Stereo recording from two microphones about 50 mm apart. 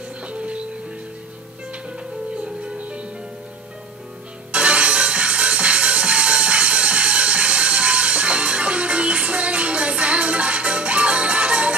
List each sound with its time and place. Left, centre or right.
0.3 s music: right
2.4 s music: centre
4.5 s music: right